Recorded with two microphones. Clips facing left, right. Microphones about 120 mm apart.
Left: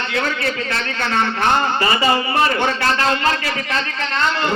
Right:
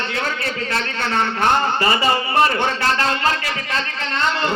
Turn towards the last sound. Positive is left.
turn(degrees=-30)  # may be behind; listen again after turning